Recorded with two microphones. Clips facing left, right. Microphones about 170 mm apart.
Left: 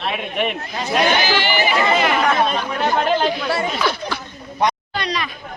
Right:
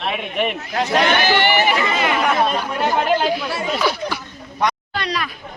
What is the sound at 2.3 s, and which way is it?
Speech, 5° right (ahead or behind).